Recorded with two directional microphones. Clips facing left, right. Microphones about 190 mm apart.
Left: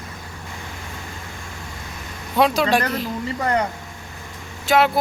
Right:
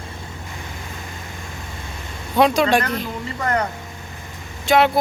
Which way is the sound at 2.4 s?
Centre (ahead or behind).